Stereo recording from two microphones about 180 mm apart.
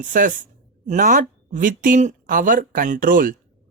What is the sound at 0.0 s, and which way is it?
A woman's voice, 50° right (ahead or behind).